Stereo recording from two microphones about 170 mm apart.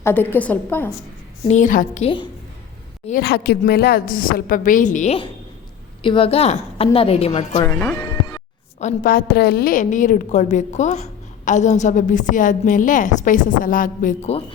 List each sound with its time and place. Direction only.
0.0 s a woman's voice: 10° left (ahead or behind)
1.5 s a woman's voice: 45° left (ahead or behind)
3.1 s a woman's voice: 65° left (ahead or behind); by 5.1 s 45° left (ahead or behind)
6.0 s a woman's voice: 30° left (ahead or behind)
7.7 s a woman's voice: 10° left (ahead or behind)
8.8 s a woman's voice: 50° left (ahead or behind)